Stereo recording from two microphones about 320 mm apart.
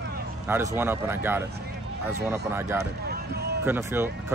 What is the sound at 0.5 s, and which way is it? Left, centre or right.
Speech, centre.